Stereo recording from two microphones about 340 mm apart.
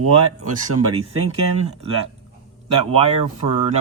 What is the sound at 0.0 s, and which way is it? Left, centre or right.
Speech, right.